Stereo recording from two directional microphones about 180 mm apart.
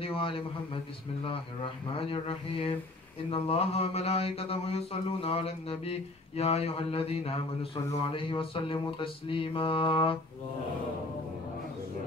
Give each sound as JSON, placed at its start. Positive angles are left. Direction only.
{"t": 0.0, "sound": "a man's voice", "side_deg": 30}